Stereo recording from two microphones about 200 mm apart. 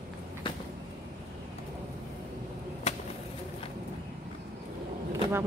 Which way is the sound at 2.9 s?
35° left (ahead or behind).